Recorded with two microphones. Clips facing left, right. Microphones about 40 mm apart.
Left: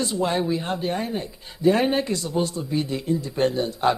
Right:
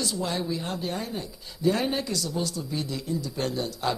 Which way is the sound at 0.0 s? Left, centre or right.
Left.